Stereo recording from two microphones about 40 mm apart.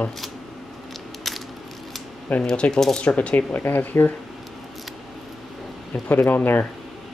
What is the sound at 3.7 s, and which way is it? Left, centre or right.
Speech, left.